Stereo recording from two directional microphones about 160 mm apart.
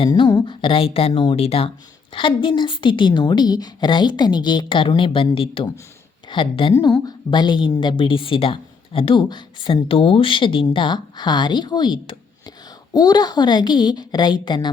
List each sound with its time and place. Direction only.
0.0 s a woman's voice: 25° left (ahead or behind)